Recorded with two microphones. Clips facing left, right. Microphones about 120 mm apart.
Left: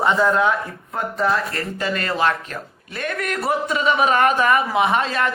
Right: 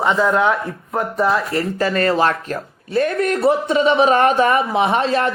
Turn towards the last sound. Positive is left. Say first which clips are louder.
# right 3 dB
turn(degrees=-35)  # may be behind; listen again after turning